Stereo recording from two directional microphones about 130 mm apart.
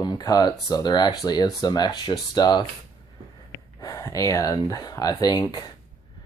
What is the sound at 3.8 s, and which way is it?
Speech, 25° left (ahead or behind).